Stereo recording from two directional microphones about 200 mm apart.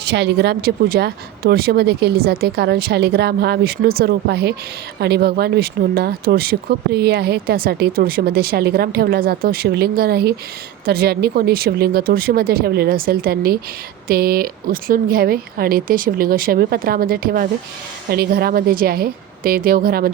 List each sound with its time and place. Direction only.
0.0 s speech: 55° right (ahead or behind)